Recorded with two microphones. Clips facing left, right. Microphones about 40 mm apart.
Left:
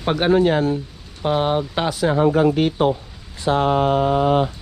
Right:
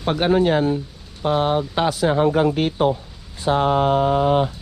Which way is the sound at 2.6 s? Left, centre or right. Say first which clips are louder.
Left 1 dB; left.